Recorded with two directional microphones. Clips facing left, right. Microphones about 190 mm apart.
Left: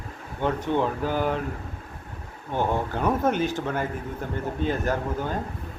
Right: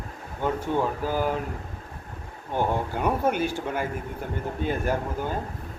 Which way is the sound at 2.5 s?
10° right (ahead or behind).